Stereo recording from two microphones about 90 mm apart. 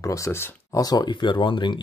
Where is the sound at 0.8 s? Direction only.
45° left (ahead or behind).